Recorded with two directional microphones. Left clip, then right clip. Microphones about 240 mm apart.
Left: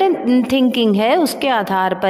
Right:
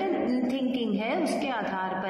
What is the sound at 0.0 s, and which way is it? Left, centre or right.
A woman's voice, left.